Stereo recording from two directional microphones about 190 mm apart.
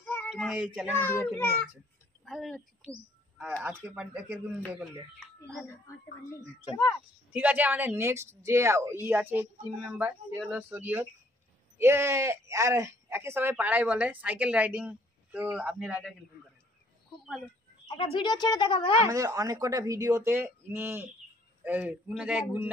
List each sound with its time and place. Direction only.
0.0 s a sound: 10° left (ahead or behind)
0.3 s speech: centre (ahead or behind)
0.9 s a child's voice: 10° left (ahead or behind); by 4.4 s 5° right (ahead or behind)
7.3 s speech: 10° right (ahead or behind)
17.8 s a woman's voice: 20° left (ahead or behind)
19.0 s speech: 15° right (ahead or behind)